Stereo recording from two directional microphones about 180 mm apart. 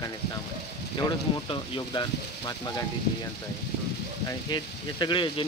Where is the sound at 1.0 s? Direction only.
25° left (ahead or behind).